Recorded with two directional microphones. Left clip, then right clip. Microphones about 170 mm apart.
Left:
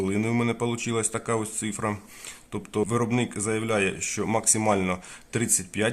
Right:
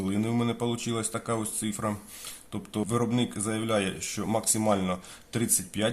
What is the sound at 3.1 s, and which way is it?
Speech, 20° left (ahead or behind).